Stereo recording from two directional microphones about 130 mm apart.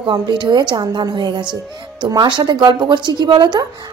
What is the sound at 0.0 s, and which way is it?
Speech, 35° right (ahead or behind).